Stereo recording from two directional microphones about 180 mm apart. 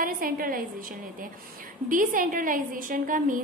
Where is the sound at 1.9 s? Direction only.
50° right (ahead or behind).